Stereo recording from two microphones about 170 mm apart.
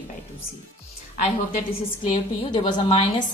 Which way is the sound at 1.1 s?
50° left (ahead or behind).